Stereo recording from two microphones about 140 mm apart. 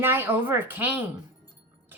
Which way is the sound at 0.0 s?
15° right (ahead or behind).